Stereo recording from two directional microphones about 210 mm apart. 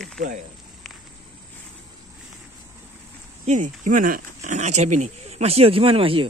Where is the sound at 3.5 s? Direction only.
35° right (ahead or behind).